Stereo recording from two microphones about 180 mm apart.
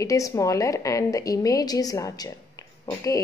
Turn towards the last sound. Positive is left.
turn(degrees=20)  # may be behind; listen again after turning